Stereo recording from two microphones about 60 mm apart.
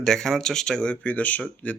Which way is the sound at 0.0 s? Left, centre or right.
Centre.